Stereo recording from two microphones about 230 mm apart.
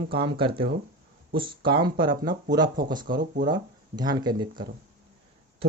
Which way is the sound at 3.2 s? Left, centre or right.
Right.